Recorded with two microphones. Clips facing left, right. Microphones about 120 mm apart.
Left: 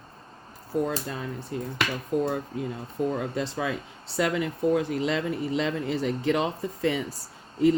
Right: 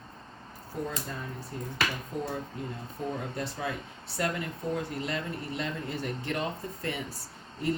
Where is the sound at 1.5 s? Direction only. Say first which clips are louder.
Left 3 dB; 90° left.